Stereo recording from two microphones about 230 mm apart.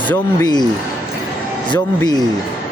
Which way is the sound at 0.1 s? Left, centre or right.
Centre.